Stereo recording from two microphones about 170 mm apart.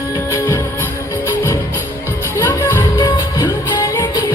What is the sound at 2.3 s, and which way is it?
Music, 15° left (ahead or behind).